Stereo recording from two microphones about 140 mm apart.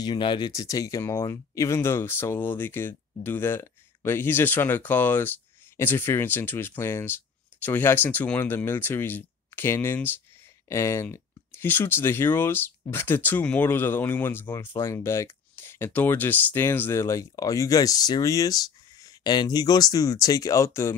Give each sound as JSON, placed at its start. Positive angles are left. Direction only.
{"t": 0.0, "sound": "speech", "side_deg": 35}